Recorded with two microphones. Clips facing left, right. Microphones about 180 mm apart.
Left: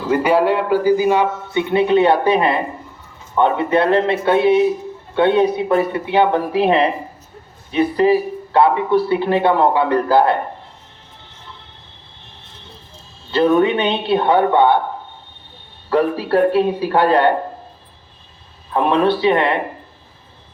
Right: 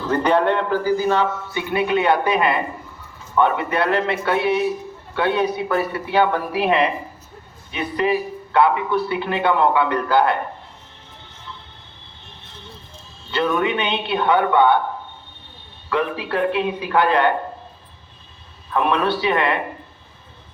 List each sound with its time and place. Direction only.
0.0 s a man's voice: 10° left (ahead or behind); by 10.4 s 30° left (ahead or behind)
13.3 s a man's voice: 30° left (ahead or behind)
15.9 s a man's voice: 40° left (ahead or behind)
18.7 s speech: 30° left (ahead or behind)